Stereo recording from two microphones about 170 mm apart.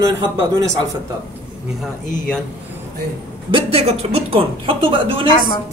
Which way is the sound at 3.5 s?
30° right (ahead or behind).